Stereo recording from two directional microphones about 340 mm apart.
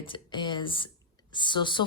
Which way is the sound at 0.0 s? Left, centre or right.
Centre.